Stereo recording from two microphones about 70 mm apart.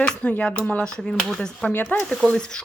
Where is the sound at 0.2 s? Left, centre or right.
Centre.